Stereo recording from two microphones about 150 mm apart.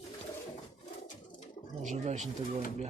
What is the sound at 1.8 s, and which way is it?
Speech, 55° right (ahead or behind).